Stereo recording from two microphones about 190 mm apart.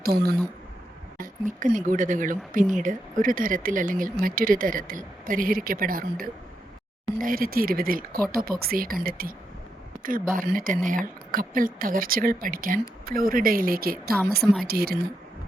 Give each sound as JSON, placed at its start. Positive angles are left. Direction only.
{"t": 0.0, "sound": "speech", "side_deg": -55}
{"t": 1.2, "sound": "speech", "side_deg": -45}